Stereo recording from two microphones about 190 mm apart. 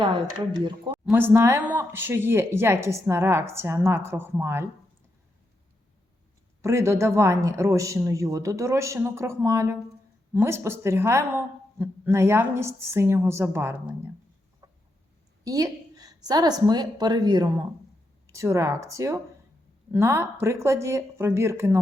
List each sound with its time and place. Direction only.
1.1 s speech: 10° right (ahead or behind)
6.6 s speech: 15° right (ahead or behind)
14.6 s chicken: 15° right (ahead or behind)
15.4 s a woman's voice: 20° right (ahead or behind)